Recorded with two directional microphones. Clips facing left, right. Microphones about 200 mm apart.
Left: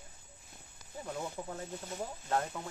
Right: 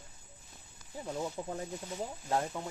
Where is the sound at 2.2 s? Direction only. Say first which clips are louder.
Right 1 dB; 10° right (ahead or behind).